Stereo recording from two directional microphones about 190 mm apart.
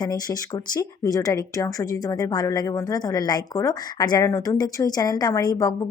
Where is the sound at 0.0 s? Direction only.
20° left (ahead or behind).